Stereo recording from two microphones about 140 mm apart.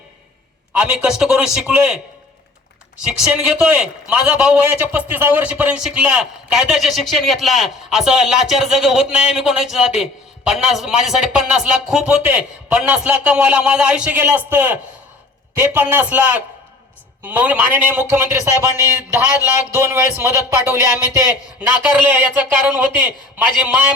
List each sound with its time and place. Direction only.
0.7 s a man's voice: 10° right (ahead or behind)
3.1 s a man's voice: 5° right (ahead or behind)